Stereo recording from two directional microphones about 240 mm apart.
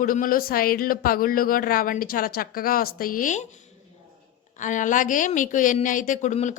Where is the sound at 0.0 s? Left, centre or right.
Left.